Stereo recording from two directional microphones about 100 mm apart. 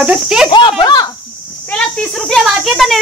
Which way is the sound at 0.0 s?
10° right (ahead or behind).